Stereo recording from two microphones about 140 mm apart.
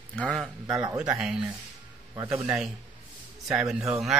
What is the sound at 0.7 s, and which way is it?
Speech, 25° right (ahead or behind).